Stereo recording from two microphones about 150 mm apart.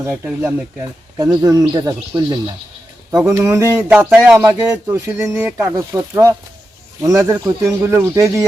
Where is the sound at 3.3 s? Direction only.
20° right (ahead or behind).